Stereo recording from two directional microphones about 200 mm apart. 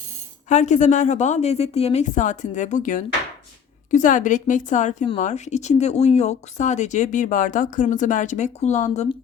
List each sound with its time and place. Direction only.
0.4 s speech: 35° left (ahead or behind)